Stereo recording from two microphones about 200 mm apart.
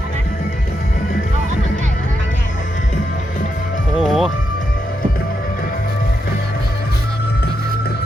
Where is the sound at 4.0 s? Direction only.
Centre (ahead or behind).